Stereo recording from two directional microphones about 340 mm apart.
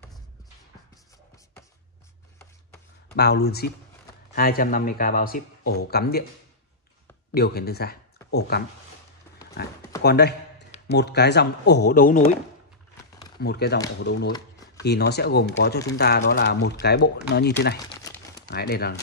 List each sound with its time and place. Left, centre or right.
3.2 s speech: left
7.3 s speech: left
10.0 s a man's voice: left
13.4 s speech: left
14.8 s speech: left